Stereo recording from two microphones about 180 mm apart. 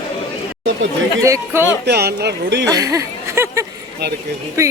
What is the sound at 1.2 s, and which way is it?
Speech, 15° right (ahead or behind).